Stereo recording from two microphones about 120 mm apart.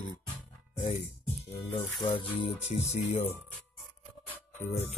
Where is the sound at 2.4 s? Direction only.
70° left (ahead or behind).